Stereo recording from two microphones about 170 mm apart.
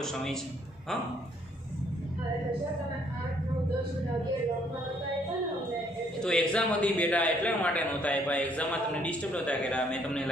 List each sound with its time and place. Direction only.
0.0 s a man's voice: 5° left (ahead or behind)
6.2 s a man's voice: 5° left (ahead or behind)